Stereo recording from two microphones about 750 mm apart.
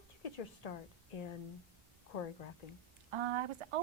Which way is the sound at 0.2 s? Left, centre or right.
Left.